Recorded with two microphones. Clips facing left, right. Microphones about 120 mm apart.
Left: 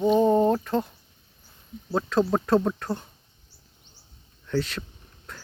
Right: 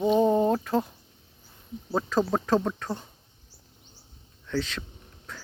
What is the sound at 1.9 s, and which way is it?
Speech, 5° right (ahead or behind).